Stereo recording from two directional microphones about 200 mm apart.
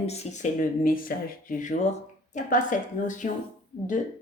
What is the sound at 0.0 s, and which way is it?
Speech, 30° left (ahead or behind).